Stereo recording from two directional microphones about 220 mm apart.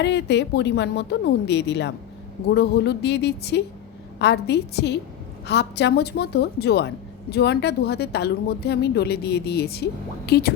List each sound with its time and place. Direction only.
0.0 s a woman's voice: 50° left (ahead or behind)